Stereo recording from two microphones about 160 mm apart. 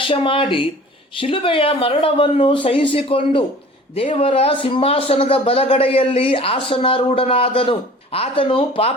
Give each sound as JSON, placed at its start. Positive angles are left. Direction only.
{"t": 0.0, "sound": "a man's voice", "side_deg": 35}